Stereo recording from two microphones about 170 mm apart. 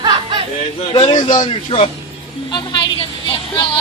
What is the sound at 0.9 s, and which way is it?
A man's voice, 30° left (ahead or behind).